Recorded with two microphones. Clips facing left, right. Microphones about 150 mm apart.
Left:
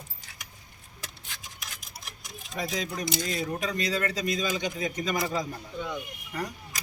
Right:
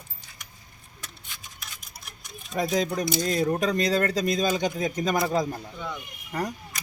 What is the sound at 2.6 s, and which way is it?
Speech, 45° right (ahead or behind).